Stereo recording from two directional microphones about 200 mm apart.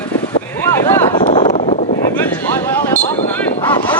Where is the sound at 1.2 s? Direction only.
35° left (ahead or behind).